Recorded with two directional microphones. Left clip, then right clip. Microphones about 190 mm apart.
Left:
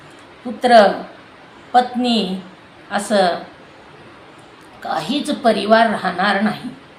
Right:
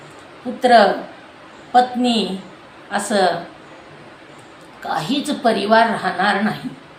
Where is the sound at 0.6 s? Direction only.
20° left (ahead or behind).